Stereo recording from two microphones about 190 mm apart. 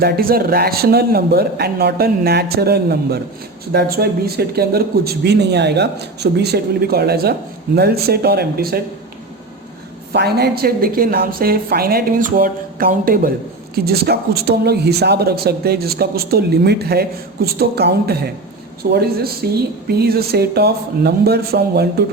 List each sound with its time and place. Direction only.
0.0 s speech: 50° right (ahead or behind)
10.1 s a woman's voice: 60° right (ahead or behind)